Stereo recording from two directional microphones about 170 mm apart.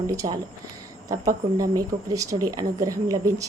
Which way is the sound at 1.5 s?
20° right (ahead or behind).